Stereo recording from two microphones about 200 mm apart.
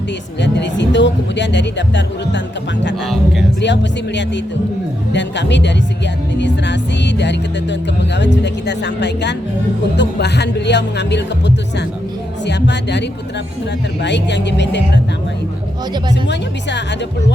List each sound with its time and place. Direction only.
0.4 s speech: 60° left (ahead or behind)
3.6 s speech: 60° left (ahead or behind)
16.3 s speech: 60° left (ahead or behind)